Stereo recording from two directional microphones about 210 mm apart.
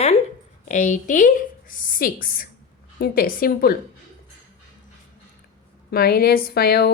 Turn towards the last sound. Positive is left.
turn(degrees=45)  # may be behind; listen again after turning